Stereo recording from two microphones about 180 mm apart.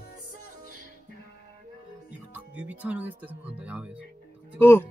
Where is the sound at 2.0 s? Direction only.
10° right (ahead or behind).